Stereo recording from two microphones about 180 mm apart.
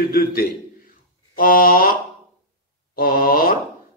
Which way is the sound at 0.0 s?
55° left (ahead or behind).